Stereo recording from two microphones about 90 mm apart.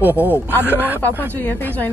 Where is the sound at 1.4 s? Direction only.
20° left (ahead or behind).